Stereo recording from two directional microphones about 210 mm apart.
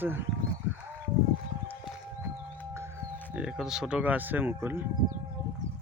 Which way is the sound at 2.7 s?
10° right (ahead or behind).